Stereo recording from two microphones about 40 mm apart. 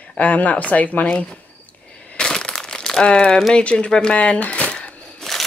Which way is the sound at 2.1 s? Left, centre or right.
Left.